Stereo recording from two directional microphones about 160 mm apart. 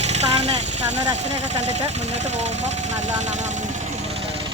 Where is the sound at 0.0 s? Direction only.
45° right (ahead or behind).